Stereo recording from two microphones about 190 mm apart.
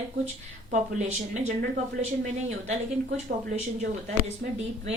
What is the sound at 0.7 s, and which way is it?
Speech, 40° right (ahead or behind).